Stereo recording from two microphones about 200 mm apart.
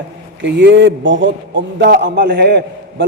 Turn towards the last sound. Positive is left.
turn(degrees=-55)  # may be behind; listen again after turning